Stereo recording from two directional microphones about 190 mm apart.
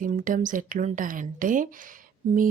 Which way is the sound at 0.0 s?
45° right (ahead or behind).